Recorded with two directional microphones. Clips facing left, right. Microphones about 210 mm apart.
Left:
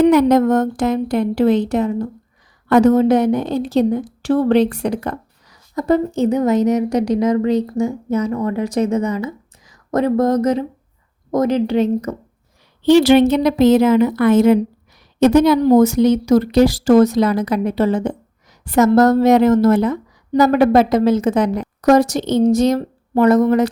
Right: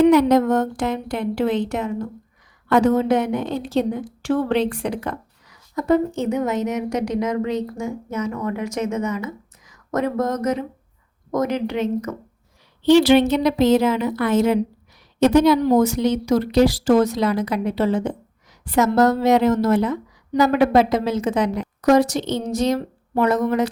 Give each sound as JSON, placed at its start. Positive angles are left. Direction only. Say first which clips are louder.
{"t": 0.0, "sound": "a woman's voice", "louder": "left 2 dB", "side_deg": 45}
{"t": 12.8, "sound": "a woman's voice", "louder": "left 3 dB", "side_deg": 45}